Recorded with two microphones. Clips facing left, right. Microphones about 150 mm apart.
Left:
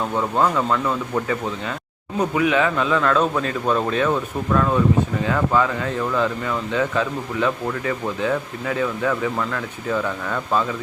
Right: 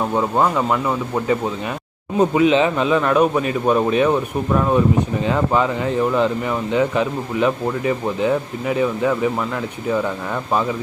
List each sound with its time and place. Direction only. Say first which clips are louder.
0.1 s speech: even; 20° right (ahead or behind)